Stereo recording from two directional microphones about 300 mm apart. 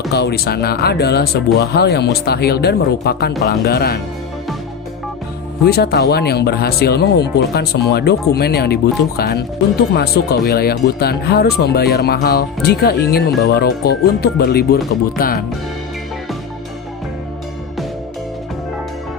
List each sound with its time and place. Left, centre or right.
0.1 s speech: left
5.6 s speech: left